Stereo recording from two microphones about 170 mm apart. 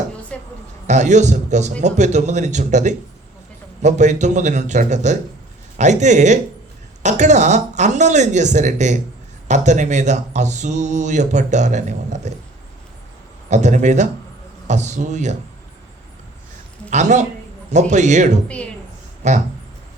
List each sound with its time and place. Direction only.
0.3 s a sound: 5° left (ahead or behind)
0.9 s speech: 45° right (ahead or behind)
13.5 s speech: 45° right (ahead or behind)
16.9 s speech: 45° right (ahead or behind)